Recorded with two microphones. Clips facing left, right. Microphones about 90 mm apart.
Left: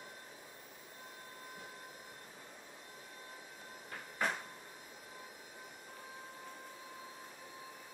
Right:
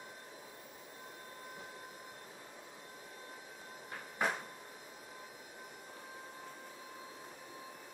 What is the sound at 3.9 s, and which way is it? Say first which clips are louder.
Cupboard open or close: right 1 dB; 5° right (ahead or behind).